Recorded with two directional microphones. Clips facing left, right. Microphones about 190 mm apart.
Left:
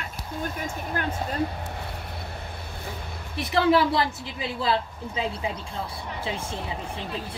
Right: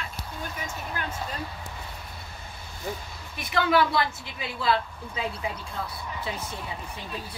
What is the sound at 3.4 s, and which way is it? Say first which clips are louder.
Speech: left 3 dB; 30° left (ahead or behind).